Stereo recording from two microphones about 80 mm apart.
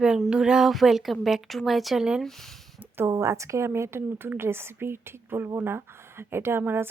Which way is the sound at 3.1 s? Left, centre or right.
Right.